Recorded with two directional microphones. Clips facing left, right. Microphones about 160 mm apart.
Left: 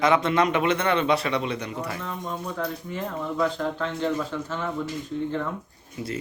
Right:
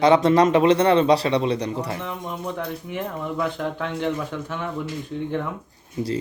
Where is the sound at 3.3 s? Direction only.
10° right (ahead or behind).